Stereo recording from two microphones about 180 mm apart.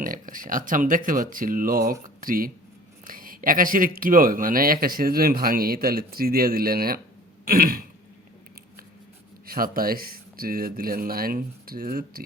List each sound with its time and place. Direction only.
0.0 s speech: 50° right (ahead or behind)
7.4 s throat clearing: 55° right (ahead or behind)
9.5 s speech: 55° right (ahead or behind)